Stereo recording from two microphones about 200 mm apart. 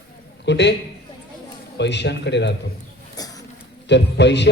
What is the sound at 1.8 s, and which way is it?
Speech, 60° left (ahead or behind).